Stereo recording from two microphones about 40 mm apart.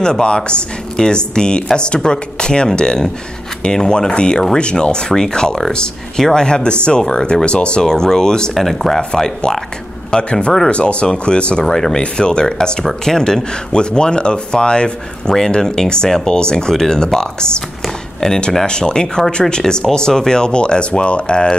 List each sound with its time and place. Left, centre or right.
0.0 s speech: left
11.6 s speech: centre
12.0 s speech: left